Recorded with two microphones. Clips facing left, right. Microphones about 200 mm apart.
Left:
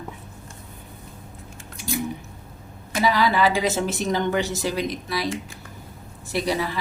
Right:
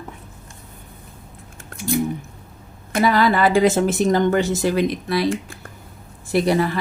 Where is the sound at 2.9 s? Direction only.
55° right (ahead or behind).